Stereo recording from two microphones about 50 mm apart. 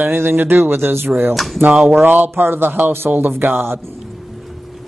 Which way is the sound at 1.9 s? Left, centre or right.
Right.